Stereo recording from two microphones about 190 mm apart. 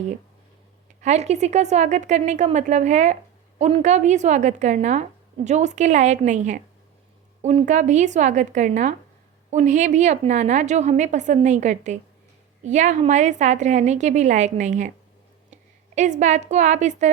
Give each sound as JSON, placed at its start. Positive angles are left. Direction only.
{"t": 1.0, "sound": "a woman's voice", "side_deg": -35}
{"t": 16.0, "sound": "a woman's voice", "side_deg": -40}